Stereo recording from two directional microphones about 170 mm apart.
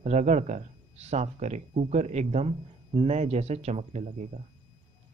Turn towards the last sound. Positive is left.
turn(degrees=-40)  # may be behind; listen again after turning